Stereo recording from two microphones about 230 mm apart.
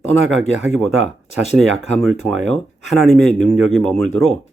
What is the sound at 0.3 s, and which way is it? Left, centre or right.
Speech, right.